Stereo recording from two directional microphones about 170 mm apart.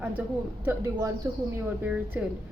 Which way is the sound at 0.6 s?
15° right (ahead or behind).